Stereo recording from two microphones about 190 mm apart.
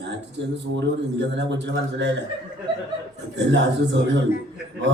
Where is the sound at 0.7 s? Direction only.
70° right (ahead or behind).